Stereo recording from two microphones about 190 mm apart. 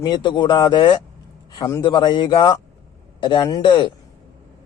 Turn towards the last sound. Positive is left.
turn(degrees=25)  # may be behind; listen again after turning